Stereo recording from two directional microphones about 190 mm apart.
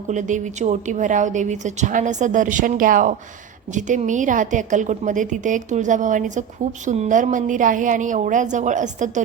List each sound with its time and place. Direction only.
0.1 s a woman's voice: 40° right (ahead or behind)